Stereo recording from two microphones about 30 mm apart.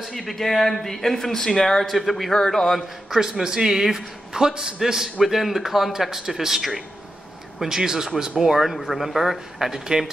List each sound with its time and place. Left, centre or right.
0.0 s speech: centre
1.9 s a man's voice: centre
2.3 s speech: centre
3.1 s a man's voice: centre
8.7 s a man's voice: centre